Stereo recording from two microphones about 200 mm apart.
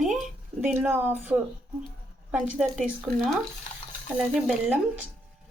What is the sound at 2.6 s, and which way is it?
Speech, 5° right (ahead or behind).